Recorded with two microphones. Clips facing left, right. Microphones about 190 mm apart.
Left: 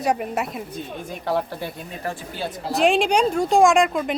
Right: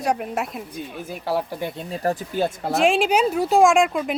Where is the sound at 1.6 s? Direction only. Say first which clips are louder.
Right 3 dB; 20° right (ahead or behind).